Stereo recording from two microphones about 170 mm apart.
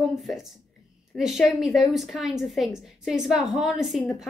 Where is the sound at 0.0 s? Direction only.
Centre (ahead or behind).